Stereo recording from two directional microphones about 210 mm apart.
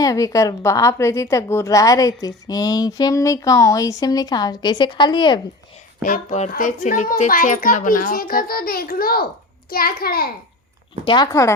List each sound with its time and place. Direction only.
0.0 s a woman's voice: 15° left (ahead or behind)
6.0 s a child's voice: 35° left (ahead or behind)
11.0 s a woman's voice: 20° left (ahead or behind)